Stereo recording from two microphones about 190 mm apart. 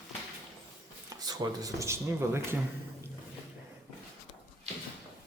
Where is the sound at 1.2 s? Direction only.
20° right (ahead or behind).